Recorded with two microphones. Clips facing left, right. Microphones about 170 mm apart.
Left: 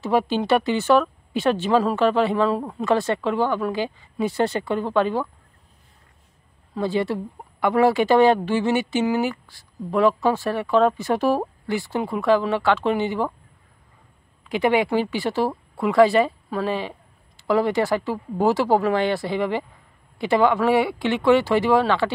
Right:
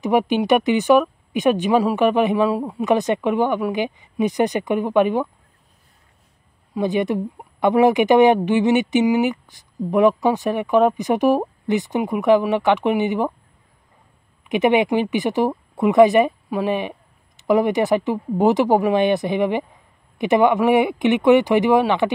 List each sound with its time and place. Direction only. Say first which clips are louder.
0.0 s speech: right 3 dB; 15° right (ahead or behind)
6.7 s speech: right 3 dB; 20° right (ahead or behind)
14.4 s speech: right 3 dB; 20° right (ahead or behind)